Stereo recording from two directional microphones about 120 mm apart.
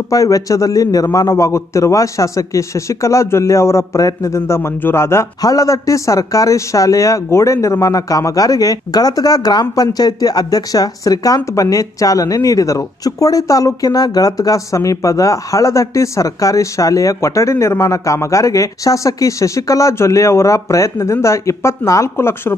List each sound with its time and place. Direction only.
0.1 s a man's voice: 30° left (ahead or behind)